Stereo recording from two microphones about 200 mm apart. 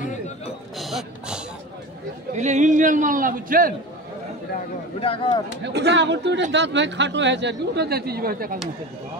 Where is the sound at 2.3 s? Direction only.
35° right (ahead or behind).